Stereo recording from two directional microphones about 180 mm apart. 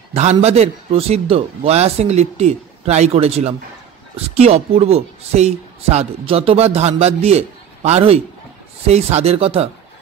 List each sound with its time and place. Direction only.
0.1 s speech: 40° right (ahead or behind)